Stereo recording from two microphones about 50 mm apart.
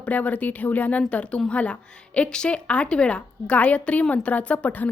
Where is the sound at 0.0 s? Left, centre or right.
Left.